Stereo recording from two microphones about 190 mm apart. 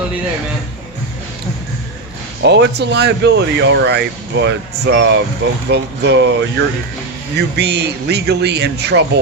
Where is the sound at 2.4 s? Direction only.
65° right (ahead or behind).